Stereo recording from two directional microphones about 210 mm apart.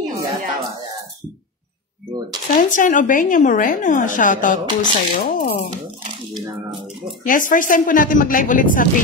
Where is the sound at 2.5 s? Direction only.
40° left (ahead or behind).